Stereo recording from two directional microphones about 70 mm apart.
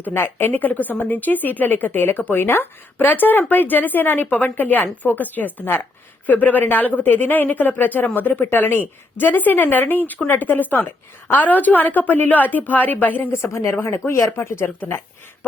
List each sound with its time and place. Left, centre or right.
0.0 s a woman's voice: left
13.4 s speech: left